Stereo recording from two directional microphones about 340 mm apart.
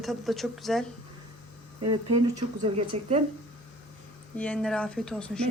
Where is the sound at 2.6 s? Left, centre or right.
Centre.